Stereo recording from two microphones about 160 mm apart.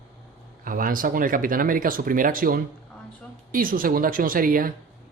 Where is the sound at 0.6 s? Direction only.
60° right (ahead or behind).